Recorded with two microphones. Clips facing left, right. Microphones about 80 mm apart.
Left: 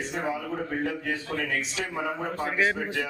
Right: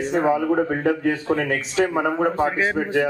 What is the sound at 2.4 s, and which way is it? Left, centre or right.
Speech, right.